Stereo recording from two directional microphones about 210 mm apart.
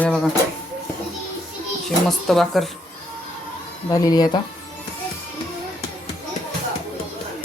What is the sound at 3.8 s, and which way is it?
Speech, 15° left (ahead or behind).